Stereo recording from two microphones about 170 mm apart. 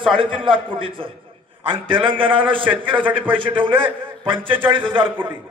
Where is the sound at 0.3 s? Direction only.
30° right (ahead or behind).